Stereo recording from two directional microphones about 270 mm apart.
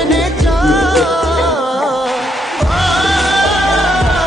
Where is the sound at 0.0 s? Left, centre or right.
Centre.